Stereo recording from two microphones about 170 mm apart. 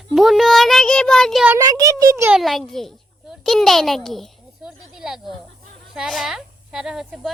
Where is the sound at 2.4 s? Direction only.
Centre (ahead or behind).